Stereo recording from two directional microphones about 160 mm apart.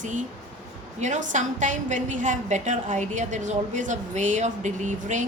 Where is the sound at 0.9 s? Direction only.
50° right (ahead or behind).